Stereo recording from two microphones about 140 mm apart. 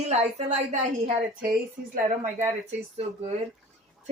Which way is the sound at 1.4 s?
90° right.